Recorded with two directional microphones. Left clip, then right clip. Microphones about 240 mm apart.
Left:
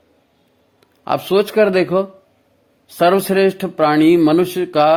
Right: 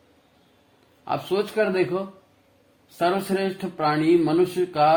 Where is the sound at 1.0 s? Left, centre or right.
Left.